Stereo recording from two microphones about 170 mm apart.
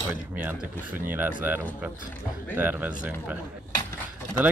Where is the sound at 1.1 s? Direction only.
10° right (ahead or behind).